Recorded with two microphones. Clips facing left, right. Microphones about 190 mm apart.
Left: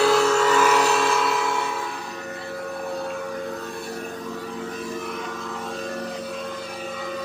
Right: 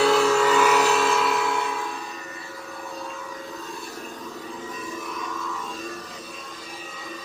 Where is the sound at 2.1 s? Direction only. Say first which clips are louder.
Left 6 dB; 65° left (ahead or behind).